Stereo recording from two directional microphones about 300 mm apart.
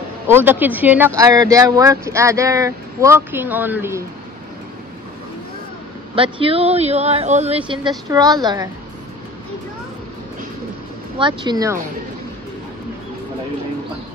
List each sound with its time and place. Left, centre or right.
0.3 s speech: centre
6.1 s speech: centre
11.1 s speech: centre